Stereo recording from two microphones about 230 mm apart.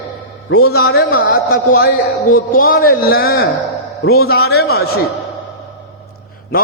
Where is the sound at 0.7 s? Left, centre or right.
Left.